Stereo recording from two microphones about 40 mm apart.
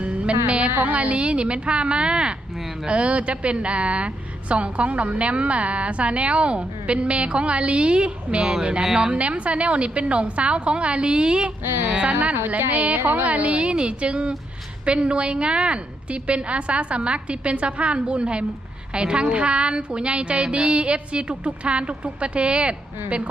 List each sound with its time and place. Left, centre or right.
0.0 s music: right
0.9 s a woman's voice: right
11.6 s speech: right
12.7 s a woman's voice: right